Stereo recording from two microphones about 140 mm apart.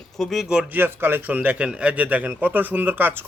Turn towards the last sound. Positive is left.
turn(degrees=-15)  # may be behind; listen again after turning